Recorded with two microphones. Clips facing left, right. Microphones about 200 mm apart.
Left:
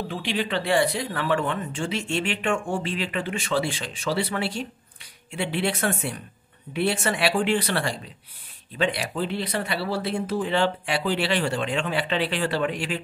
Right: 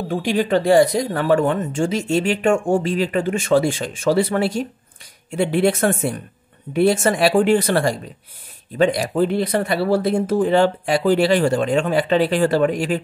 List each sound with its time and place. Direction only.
0.1 s speech: 45° right (ahead or behind)